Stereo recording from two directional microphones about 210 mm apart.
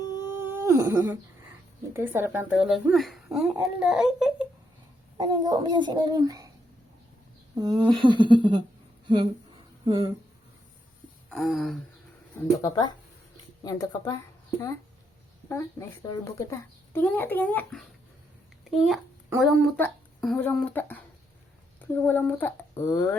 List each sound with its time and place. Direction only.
0.0 s wail: 20° left (ahead or behind)
0.3 s wail: 10° right (ahead or behind)
1.9 s speech: 10° right (ahead or behind)
5.1 s a child's voice: 20° right (ahead or behind)
7.5 s a child's voice: 20° right (ahead or behind)
9.8 s speech: 25° right (ahead or behind)
11.3 s speech: centre (ahead or behind)
12.6 s a child's voice: 20° left (ahead or behind)
16.0 s a child's voice: 15° left (ahead or behind)